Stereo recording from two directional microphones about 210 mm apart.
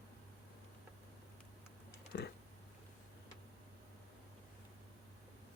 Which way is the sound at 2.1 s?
50° left (ahead or behind).